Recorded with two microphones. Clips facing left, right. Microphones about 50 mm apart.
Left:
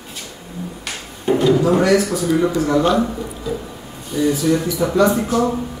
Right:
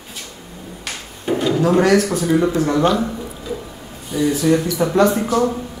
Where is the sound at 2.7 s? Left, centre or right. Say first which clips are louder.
Left 2 dB; centre.